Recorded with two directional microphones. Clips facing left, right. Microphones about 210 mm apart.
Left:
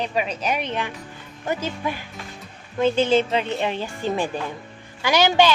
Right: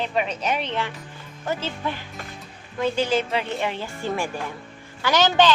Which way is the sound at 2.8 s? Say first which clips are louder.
Left 4 dB; 25° left (ahead or behind).